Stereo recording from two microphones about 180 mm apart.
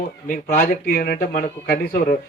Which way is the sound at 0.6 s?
65° left (ahead or behind).